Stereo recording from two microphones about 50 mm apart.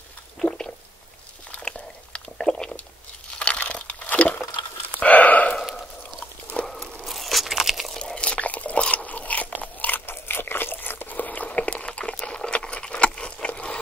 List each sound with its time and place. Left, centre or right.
0.4 s stomach rumble: centre
1.6 s chewing: centre
3.3 s crumpling: left
5.0 s a sound: left
5.6 s a sound: centre
7.0 s crunch: centre
8.0 s biting: left
10.0 s a sound: left
12.3 s boiling: centre
12.5 s keys jangling: left